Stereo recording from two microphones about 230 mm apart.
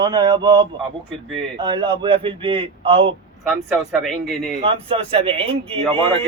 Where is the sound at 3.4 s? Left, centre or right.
Centre.